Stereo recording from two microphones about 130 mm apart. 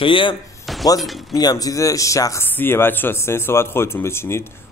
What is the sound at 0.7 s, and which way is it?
Shatter, centre (ahead or behind).